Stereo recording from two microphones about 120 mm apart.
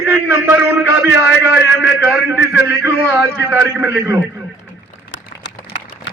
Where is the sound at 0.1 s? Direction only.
20° right (ahead or behind).